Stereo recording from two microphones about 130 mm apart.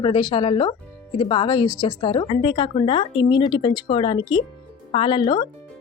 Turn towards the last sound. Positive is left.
turn(degrees=35)  # may be behind; listen again after turning